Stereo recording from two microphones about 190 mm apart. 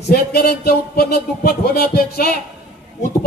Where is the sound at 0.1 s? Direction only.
55° left (ahead or behind).